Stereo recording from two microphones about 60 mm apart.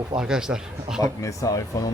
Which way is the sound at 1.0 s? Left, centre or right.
Left.